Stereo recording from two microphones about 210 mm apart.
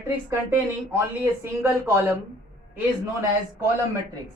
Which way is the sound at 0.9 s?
10° right (ahead or behind).